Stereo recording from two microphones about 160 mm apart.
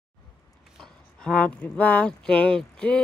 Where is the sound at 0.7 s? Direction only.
5° left (ahead or behind).